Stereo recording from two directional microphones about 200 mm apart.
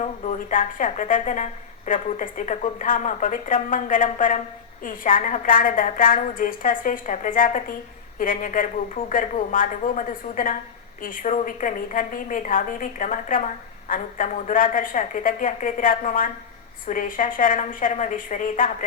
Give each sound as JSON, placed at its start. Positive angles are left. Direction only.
{"t": 0.0, "sound": "a woman's voice", "side_deg": 40}